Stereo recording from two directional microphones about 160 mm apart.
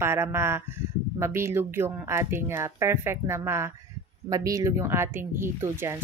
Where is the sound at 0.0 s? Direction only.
15° right (ahead or behind).